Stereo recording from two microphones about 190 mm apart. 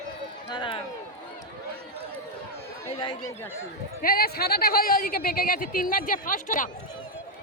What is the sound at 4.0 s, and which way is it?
Speech, 50° left (ahead or behind).